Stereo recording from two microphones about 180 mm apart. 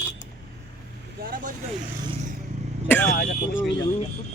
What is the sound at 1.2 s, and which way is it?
Vehicle, 55° right (ahead or behind).